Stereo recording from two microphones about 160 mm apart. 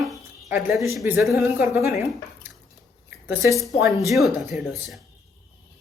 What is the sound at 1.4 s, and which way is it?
Speech, 10° right (ahead or behind).